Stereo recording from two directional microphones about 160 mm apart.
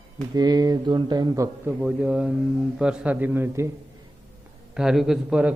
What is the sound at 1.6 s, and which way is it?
Speech, 5° right (ahead or behind).